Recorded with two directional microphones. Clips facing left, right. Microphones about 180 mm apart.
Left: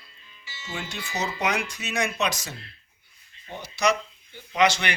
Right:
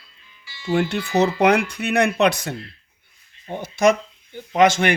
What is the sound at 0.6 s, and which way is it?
Speech, 60° right (ahead or behind).